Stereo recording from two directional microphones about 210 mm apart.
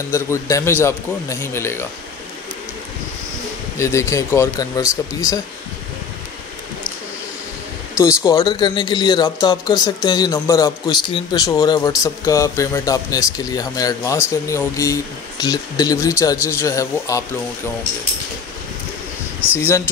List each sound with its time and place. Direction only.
0.1 s speech: 15° left (ahead or behind)
3.7 s speech: 15° left (ahead or behind)
8.2 s speech: 15° left (ahead or behind)
19.4 s speech: 5° right (ahead or behind)